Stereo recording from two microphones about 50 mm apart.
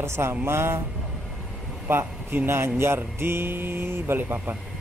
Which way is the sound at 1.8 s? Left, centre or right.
Right.